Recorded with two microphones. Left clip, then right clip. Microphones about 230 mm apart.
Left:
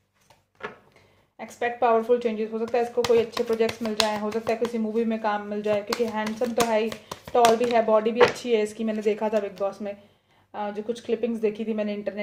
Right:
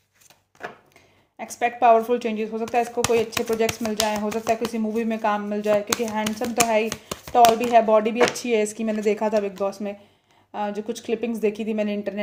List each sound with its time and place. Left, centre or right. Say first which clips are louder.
1.4 s speech: right 4 dB; right